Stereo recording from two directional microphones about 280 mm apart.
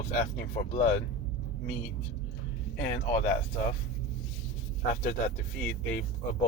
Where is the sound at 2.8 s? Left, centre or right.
Left.